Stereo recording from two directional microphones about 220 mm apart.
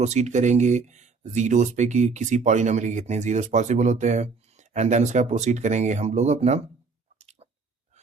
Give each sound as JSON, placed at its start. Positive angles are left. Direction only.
{"t": 0.0, "sound": "speech", "side_deg": -30}
{"t": 7.2, "sound": "squish", "side_deg": -30}